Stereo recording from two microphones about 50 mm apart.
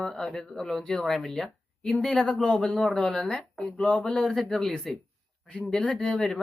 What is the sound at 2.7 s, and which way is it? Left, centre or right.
Speech, centre.